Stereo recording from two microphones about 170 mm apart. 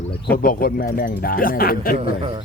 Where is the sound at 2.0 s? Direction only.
30° right (ahead or behind).